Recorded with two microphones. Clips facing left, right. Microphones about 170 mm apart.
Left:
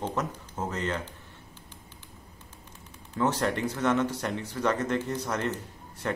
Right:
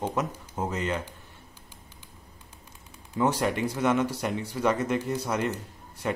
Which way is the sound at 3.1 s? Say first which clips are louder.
Right 1 dB; 10° right (ahead or behind).